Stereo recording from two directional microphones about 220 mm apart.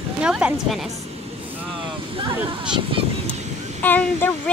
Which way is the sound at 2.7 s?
25° right (ahead or behind).